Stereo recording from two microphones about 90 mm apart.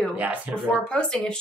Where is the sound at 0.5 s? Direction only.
20° right (ahead or behind).